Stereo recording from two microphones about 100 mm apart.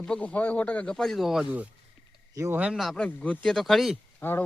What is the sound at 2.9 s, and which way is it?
Speech, 15° left (ahead or behind).